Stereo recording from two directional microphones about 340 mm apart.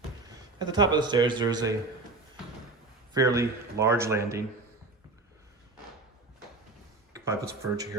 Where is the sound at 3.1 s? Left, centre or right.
Centre.